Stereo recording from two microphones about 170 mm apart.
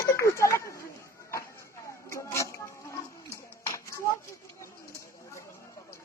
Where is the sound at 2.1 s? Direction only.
15° left (ahead or behind).